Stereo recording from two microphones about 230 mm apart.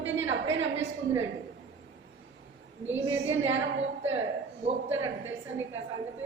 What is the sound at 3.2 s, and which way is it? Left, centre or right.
Speech, right.